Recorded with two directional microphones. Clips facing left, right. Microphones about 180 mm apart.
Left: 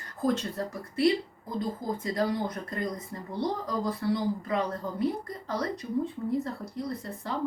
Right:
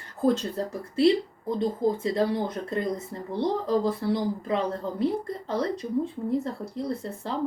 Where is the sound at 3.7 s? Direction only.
25° right (ahead or behind).